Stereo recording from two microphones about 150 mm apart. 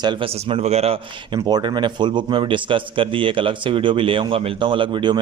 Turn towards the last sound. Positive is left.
turn(degrees=-30)  # may be behind; listen again after turning